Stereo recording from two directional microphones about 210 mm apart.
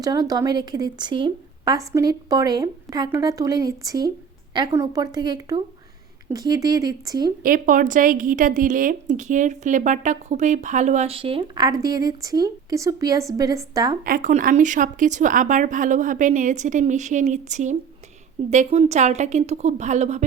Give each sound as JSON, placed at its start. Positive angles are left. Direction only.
{"t": 0.0, "sound": "a woman's voice", "side_deg": -15}
{"t": 7.4, "sound": "a woman's voice", "side_deg": -40}
{"t": 14.0, "sound": "a woman's voice", "side_deg": -40}